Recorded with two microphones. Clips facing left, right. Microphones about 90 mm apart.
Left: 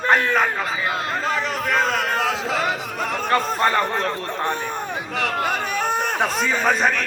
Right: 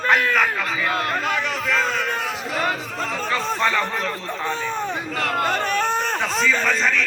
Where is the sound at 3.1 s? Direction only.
55° left (ahead or behind).